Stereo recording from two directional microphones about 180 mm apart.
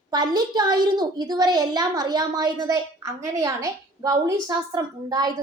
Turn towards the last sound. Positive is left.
turn(degrees=-20)  # may be behind; listen again after turning